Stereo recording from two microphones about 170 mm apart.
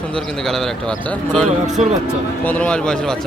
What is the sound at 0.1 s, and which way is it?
A man's voice, 5° left (ahead or behind).